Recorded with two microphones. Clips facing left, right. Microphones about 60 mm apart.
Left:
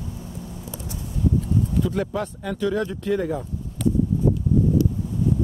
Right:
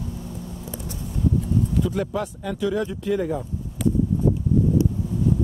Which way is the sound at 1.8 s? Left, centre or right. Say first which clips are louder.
Even; centre.